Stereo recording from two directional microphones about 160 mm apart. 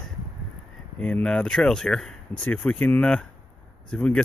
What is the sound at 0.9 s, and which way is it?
Speech, 5° left (ahead or behind).